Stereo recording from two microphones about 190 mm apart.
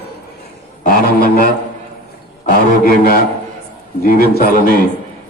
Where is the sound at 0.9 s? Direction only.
50° left (ahead or behind).